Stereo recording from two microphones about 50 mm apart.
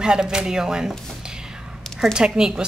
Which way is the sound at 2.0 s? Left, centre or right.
Centre.